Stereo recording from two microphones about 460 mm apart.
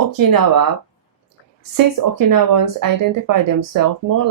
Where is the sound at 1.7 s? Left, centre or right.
Right.